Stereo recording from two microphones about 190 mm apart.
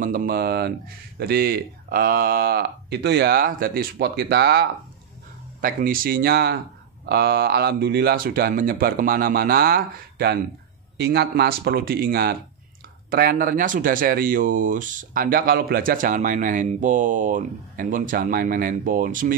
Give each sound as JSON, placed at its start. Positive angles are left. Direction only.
{"t": 0.0, "sound": "speech", "side_deg": -45}
{"t": 5.6, "sound": "speech", "side_deg": -50}